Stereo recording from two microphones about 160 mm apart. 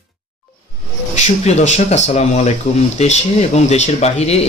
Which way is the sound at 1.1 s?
45° left (ahead or behind).